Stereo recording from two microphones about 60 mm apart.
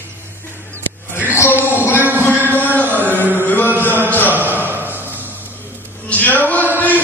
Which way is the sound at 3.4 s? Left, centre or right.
Left.